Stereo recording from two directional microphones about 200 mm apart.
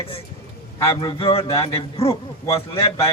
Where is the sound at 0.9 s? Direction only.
25° left (ahead or behind).